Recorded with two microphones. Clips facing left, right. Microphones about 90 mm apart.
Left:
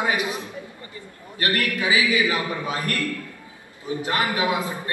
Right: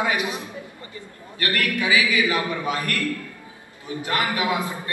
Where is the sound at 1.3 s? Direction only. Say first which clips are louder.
Even; 30° left (ahead or behind).